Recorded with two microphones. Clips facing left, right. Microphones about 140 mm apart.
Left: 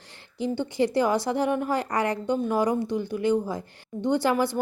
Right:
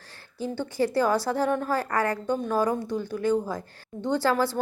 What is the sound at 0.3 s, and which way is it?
A woman's voice, 15° left (ahead or behind).